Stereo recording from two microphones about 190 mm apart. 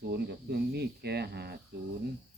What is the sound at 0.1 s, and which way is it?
Speech, 60° right (ahead or behind).